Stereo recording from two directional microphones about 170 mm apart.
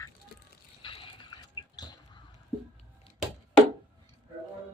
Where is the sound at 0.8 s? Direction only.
30° left (ahead or behind).